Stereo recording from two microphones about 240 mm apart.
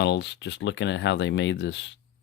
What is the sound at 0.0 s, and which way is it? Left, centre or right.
Speech, left.